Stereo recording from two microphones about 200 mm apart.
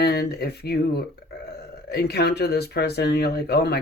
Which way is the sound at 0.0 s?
55° left (ahead or behind).